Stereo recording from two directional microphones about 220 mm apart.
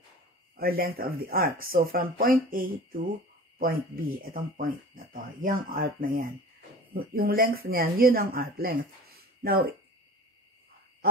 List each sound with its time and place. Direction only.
0.6 s speech: 45° right (ahead or behind)